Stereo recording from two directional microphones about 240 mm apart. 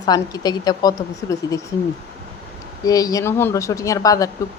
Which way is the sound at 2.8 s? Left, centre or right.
Centre.